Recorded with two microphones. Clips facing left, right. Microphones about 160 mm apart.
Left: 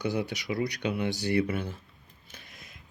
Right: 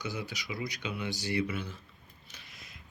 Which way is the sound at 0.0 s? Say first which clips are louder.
Left 8 dB; 60° left (ahead or behind).